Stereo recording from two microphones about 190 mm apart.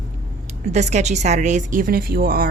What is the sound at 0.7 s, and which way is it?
A woman's voice, 35° right (ahead or behind).